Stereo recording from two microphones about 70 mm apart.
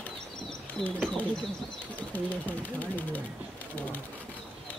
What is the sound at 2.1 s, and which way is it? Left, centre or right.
Speech, left.